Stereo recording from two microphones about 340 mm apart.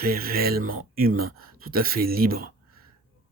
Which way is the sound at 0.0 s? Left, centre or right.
Right.